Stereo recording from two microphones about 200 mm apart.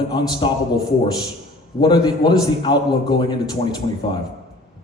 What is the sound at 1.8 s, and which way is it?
A man's voice, 20° left (ahead or behind).